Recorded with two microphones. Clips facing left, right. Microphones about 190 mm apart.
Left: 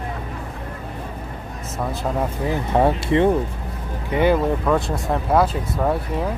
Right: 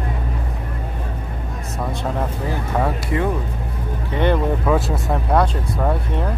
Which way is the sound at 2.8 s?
25° left (ahead or behind).